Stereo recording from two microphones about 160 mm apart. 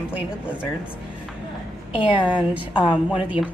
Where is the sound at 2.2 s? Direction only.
30° left (ahead or behind).